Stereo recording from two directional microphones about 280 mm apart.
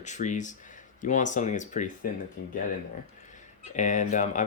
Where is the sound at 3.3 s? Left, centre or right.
Left.